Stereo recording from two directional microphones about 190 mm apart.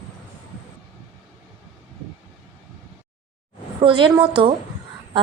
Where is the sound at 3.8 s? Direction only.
25° right (ahead or behind).